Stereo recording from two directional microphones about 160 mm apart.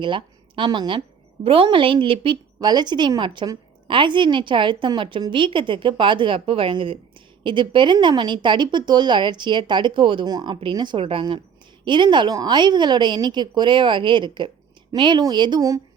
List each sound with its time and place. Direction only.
0.0 s a woman's voice: 30° right (ahead or behind)